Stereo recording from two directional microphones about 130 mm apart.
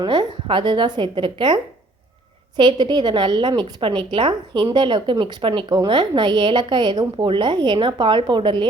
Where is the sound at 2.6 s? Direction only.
35° right (ahead or behind).